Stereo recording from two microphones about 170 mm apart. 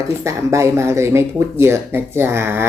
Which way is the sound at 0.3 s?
15° right (ahead or behind).